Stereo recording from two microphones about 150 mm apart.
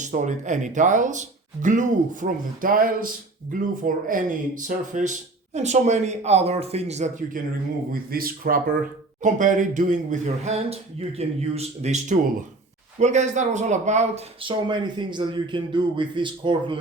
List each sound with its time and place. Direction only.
0.0 s speech: 55° right (ahead or behind)
8.1 s speech: 75° right (ahead or behind)
9.2 s speech: 60° right (ahead or behind)
14.4 s a man's voice: 30° right (ahead or behind)